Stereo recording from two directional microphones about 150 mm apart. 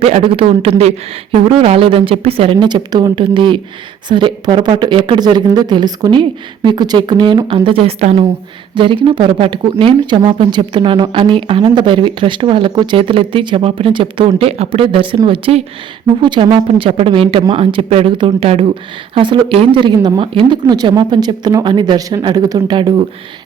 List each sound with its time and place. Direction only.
0.0 s speech: 40° right (ahead or behind)